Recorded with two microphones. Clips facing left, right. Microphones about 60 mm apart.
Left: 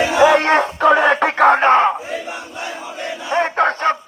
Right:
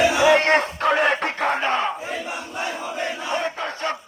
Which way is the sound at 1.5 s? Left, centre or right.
Left.